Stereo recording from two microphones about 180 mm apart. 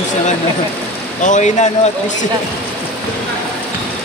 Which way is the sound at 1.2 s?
40° left (ahead or behind).